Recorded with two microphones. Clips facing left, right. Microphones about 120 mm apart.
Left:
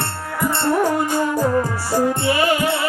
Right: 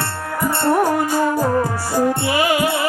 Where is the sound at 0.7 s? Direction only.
40° right (ahead or behind).